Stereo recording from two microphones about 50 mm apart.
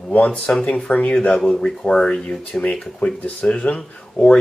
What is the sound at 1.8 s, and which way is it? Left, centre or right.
Speech, centre.